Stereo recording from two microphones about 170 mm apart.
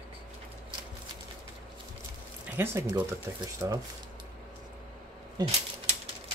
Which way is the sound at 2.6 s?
15° right (ahead or behind).